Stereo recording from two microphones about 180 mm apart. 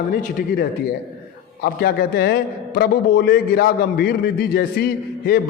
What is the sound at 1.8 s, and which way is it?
A man's voice, 60° left (ahead or behind).